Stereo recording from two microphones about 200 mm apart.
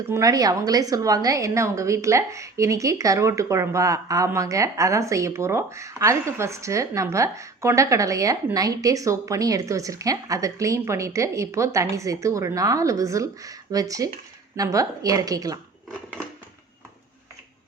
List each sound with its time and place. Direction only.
0.1 s a woman's voice: 15° right (ahead or behind)